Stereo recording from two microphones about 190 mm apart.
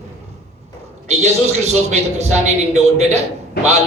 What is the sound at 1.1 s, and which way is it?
A woman's voice, 35° right (ahead or behind).